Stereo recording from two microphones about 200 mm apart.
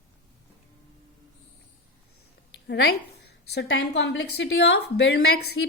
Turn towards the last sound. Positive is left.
turn(degrees=55)  # may be behind; listen again after turning